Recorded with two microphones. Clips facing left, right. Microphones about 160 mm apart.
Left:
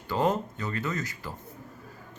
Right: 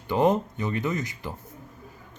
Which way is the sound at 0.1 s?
20° right (ahead or behind).